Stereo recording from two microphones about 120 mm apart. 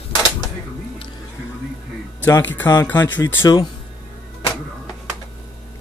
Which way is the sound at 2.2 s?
15° left (ahead or behind).